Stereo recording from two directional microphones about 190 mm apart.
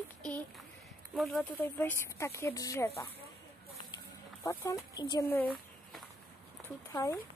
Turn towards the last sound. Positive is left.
turn(degrees=15)  # may be behind; listen again after turning